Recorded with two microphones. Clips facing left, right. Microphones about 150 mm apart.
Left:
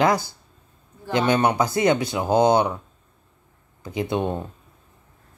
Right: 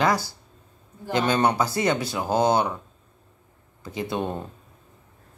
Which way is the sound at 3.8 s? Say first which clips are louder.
Left 4 dB; 20° left (ahead or behind).